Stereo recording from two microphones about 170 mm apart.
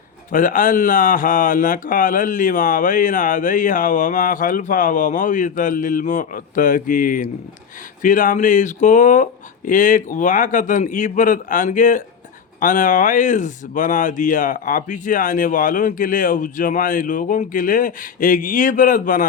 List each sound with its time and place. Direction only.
0.3 s speech: 50° left (ahead or behind)